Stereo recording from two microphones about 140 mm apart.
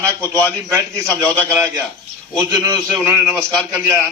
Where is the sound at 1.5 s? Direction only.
20° right (ahead or behind).